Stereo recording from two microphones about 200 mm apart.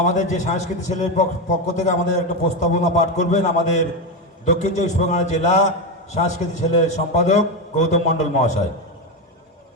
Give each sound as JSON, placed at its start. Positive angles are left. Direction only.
{"t": 0.0, "sound": "a man's voice", "side_deg": 35}